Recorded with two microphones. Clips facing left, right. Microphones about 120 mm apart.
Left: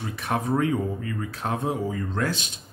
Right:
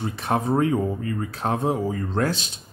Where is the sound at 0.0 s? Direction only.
30° right (ahead or behind).